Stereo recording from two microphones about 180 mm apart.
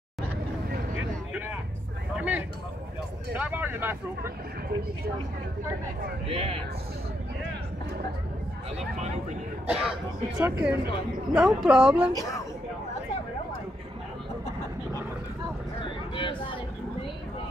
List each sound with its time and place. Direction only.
2.1 s a sound: 10° right (ahead or behind)
3.3 s speech: 10° right (ahead or behind)
6.2 s speech: 35° right (ahead or behind)
8.7 s speech: 40° right (ahead or behind)
9.7 s speech: 5° right (ahead or behind)
16.2 s speech: 30° left (ahead or behind)